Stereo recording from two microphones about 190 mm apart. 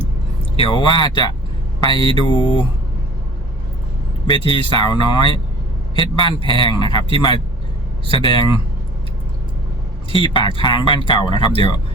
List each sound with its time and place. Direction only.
0.5 s speech: 25° left (ahead or behind)
4.3 s speech: 25° left (ahead or behind)
10.1 s speech: 25° left (ahead or behind)